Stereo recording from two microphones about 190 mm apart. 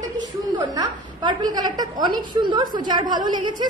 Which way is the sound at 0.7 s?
20° right (ahead or behind).